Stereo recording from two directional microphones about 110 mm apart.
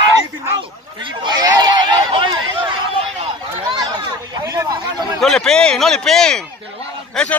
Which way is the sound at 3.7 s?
40° right (ahead or behind).